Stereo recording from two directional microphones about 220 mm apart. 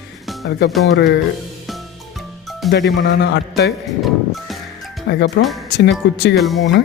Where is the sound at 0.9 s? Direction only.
50° left (ahead or behind).